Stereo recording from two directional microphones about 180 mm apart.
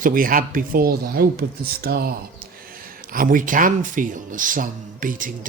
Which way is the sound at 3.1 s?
50° right (ahead or behind).